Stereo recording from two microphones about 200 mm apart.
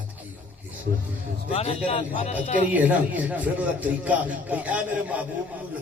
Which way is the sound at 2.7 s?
10° right (ahead or behind).